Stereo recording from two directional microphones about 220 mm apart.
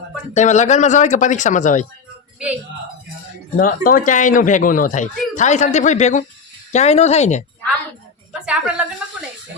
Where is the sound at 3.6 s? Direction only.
40° left (ahead or behind).